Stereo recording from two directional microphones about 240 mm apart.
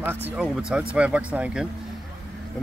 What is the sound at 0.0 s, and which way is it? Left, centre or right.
Speech, centre.